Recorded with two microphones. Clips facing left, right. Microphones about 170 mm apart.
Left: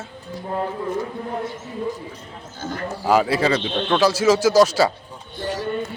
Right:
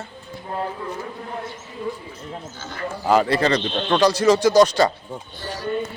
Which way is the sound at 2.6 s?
45° left (ahead or behind).